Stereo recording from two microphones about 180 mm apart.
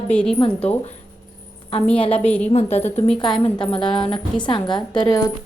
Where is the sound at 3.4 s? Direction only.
30° left (ahead or behind).